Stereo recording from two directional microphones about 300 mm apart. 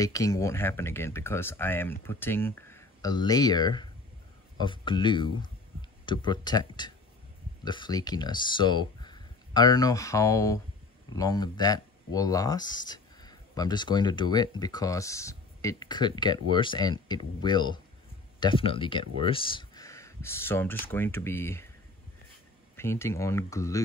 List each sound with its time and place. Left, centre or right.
0.0 s speech: centre
22.8 s speech: centre